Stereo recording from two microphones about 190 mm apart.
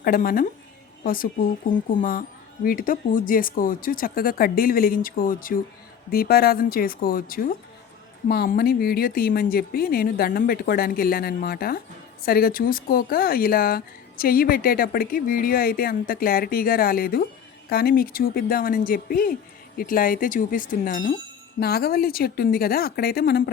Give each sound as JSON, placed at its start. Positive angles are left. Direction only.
{"t": 0.0, "sound": "speech", "side_deg": 50}